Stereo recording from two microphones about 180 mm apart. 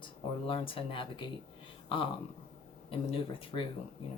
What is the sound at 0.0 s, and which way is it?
Speech, 30° left (ahead or behind).